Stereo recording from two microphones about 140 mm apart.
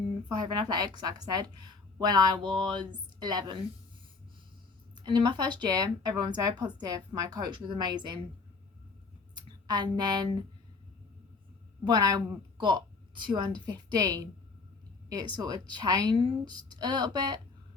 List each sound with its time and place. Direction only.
0.3 s a woman's voice: 30° right (ahead or behind)
5.0 s speech: 35° right (ahead or behind)
9.3 s speech: 30° right (ahead or behind)
11.9 s a woman's voice: 30° right (ahead or behind)